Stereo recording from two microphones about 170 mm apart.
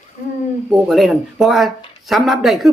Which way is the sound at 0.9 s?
Centre (ahead or behind).